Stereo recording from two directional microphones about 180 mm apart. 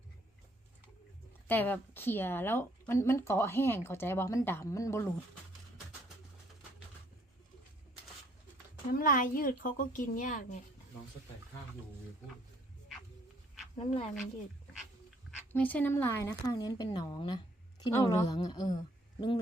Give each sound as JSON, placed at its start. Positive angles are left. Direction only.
{"t": 1.5, "sound": "speech", "side_deg": 10}
{"t": 8.9, "sound": "speech", "side_deg": 50}
{"t": 13.7, "sound": "speech", "side_deg": 35}
{"t": 15.5, "sound": "speech", "side_deg": 10}